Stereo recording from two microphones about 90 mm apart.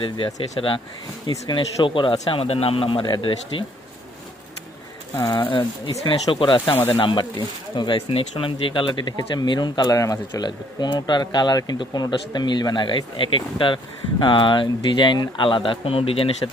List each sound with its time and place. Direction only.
0.6 s a man's voice: 70° left (ahead or behind)
2.3 s a man's voice: 90° left; by 3.3 s 65° left (ahead or behind)
3.5 s speech: 85° left
5.3 s a man's voice: 65° left (ahead or behind); by 16.3 s 90° left